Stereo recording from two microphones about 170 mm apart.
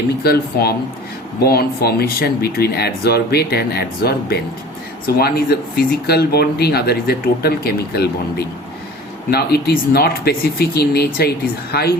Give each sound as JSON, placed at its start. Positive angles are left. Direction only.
{"t": 0.2, "sound": "speech", "side_deg": 65}